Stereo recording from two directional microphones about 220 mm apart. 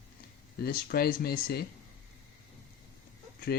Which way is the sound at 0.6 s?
45° left (ahead or behind).